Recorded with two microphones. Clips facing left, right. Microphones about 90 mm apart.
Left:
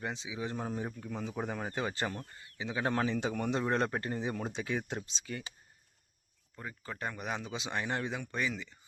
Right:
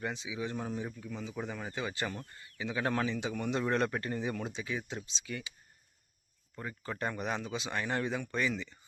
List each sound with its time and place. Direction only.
0.0 s speech: 25° left (ahead or behind)
2.4 s speech: 20° left (ahead or behind); by 3.6 s 40° left (ahead or behind)
3.6 s speech: 25° left (ahead or behind)
4.4 s speech: 55° left (ahead or behind)
6.6 s speech: 5° left (ahead or behind)